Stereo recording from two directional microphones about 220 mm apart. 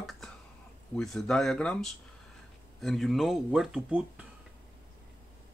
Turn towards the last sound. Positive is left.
turn(degrees=-5)  # may be behind; listen again after turning